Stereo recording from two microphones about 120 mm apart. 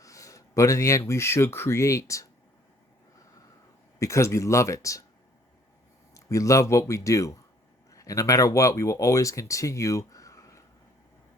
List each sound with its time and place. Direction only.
0.0 s speech: 25° left (ahead or behind)
4.0 s speech: 25° left (ahead or behind)
6.1 s speech: 25° left (ahead or behind)